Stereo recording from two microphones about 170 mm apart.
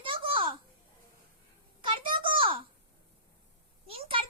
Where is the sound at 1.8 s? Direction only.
30° right (ahead or behind).